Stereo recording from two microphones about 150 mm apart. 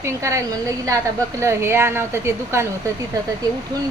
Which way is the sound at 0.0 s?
20° right (ahead or behind).